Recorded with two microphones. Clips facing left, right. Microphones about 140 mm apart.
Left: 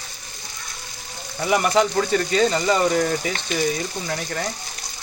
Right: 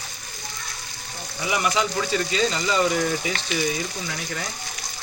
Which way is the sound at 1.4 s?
45° left (ahead or behind).